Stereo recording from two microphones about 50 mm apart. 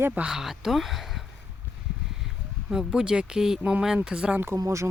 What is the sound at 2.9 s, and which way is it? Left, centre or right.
Speech, centre.